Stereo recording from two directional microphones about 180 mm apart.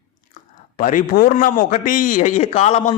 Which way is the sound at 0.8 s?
45° left (ahead or behind).